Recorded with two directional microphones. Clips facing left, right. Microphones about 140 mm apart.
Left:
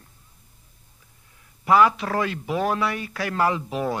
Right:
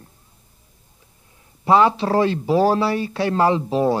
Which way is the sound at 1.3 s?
30° right (ahead or behind).